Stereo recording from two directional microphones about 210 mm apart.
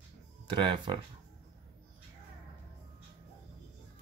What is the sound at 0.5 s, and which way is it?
Speech, 20° right (ahead or behind).